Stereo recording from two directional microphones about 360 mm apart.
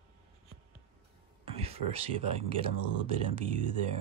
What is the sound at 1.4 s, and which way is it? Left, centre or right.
Speech, centre.